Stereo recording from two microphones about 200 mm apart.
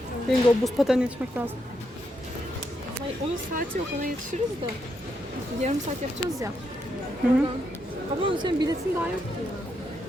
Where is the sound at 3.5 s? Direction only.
45° right (ahead or behind).